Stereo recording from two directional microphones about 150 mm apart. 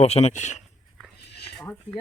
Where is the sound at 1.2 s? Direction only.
90° left.